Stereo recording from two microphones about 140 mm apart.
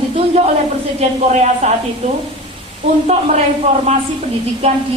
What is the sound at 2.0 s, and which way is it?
Speech, 45° right (ahead or behind).